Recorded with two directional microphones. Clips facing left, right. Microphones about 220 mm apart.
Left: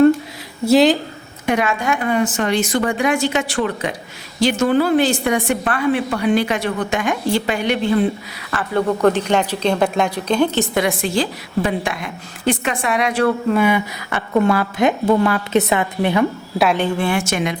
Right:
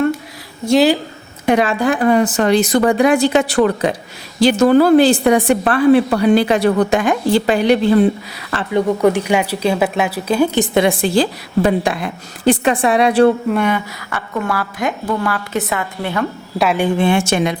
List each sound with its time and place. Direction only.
0.6 s speech: 5° left (ahead or behind)
1.5 s a woman's voice: 30° right (ahead or behind)
8.7 s speech: 10° right (ahead or behind)
10.8 s a woman's voice: 30° right (ahead or behind)
13.5 s speech: 5° left (ahead or behind)
14.1 s a woman's voice: 20° left (ahead or behind)
16.6 s speech: centre (ahead or behind)
16.8 s a woman's voice: 20° right (ahead or behind)